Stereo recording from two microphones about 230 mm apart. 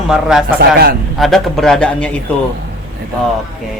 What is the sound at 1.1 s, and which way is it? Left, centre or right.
A man's voice, centre.